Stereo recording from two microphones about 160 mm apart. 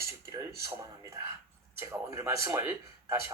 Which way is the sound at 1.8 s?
15° right (ahead or behind).